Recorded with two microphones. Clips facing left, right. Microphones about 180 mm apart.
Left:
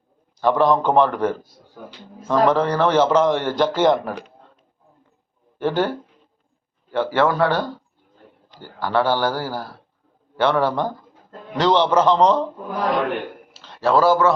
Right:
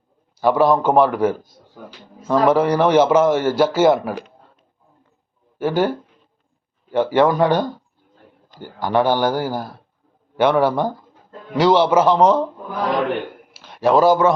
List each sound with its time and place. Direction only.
0.3 s a man's voice: 10° right (ahead or behind)
5.5 s a man's voice: 10° right (ahead or behind)
6.9 s a man's voice: 15° right (ahead or behind)
13.5 s a man's voice: 10° right (ahead or behind)